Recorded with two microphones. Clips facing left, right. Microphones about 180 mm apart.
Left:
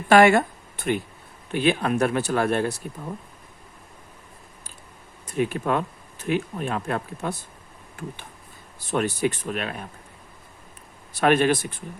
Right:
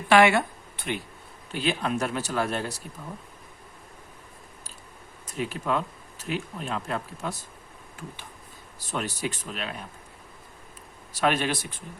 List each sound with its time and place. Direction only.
0.1 s speech: 45° left (ahead or behind)
5.2 s speech: 55° left (ahead or behind)
8.9 s speech: 55° left (ahead or behind)
11.1 s speech: 55° left (ahead or behind)